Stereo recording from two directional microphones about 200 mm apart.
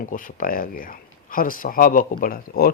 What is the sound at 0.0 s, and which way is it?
Speech, 45° left (ahead or behind).